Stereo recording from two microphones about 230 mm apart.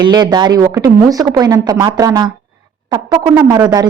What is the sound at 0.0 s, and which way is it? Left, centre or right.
A woman's voice, centre.